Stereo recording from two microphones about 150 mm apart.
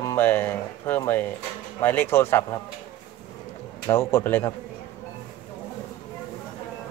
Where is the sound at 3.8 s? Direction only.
15° left (ahead or behind).